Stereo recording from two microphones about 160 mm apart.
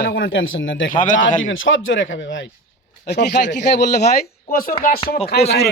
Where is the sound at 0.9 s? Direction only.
55° left (ahead or behind).